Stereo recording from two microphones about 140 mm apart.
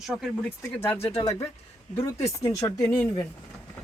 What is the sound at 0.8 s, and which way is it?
Speech, 15° left (ahead or behind).